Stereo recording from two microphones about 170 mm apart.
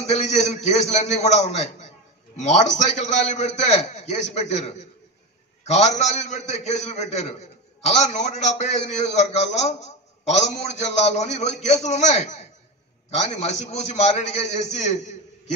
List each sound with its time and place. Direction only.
0.0 s a man's voice: 40° left (ahead or behind)